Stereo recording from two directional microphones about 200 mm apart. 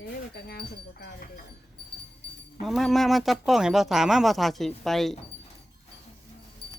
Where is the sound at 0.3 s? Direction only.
50° left (ahead or behind).